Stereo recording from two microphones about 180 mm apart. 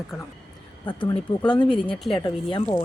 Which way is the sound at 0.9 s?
25° left (ahead or behind).